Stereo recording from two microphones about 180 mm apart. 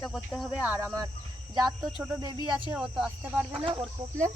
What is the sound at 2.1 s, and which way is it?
Cricket, 25° right (ahead or behind).